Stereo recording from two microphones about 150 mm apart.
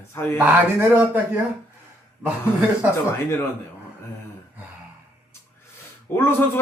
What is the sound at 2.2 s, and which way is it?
Speech, 10° right (ahead or behind).